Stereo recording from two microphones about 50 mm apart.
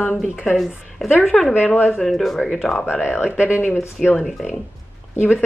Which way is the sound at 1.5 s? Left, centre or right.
Left.